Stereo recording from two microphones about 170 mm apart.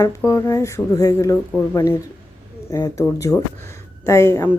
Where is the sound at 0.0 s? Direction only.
15° left (ahead or behind).